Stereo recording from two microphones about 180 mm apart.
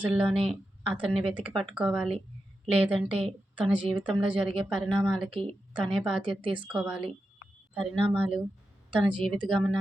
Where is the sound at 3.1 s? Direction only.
30° right (ahead or behind).